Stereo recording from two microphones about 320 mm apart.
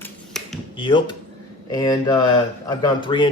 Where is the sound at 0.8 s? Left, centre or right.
Centre.